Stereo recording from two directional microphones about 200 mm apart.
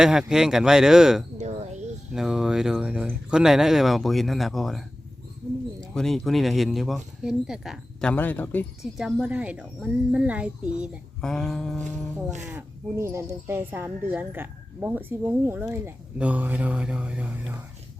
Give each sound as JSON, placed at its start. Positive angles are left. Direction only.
{"t": 0.0, "sound": "speech", "side_deg": -5}
{"t": 1.4, "sound": "a sound", "side_deg": -35}
{"t": 2.1, "sound": "speech", "side_deg": 0}
{"t": 5.9, "sound": "speech", "side_deg": 0}
{"t": 8.1, "sound": "speech", "side_deg": 10}
{"t": 8.8, "sound": "speech", "side_deg": 0}
{"t": 11.9, "sound": "music", "side_deg": -35}
{"t": 12.5, "sound": "speech", "side_deg": -10}